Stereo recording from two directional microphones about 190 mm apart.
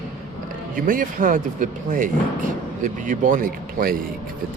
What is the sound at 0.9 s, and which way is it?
Speech, 45° right (ahead or behind).